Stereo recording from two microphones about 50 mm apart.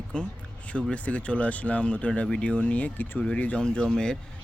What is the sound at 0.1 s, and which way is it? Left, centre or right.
Speech, left.